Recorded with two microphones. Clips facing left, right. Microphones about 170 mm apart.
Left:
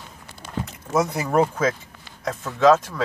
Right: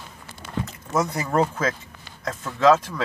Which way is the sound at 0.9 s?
20° left (ahead or behind).